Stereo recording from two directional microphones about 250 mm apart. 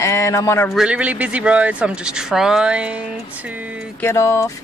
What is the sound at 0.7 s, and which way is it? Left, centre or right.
Speech, centre.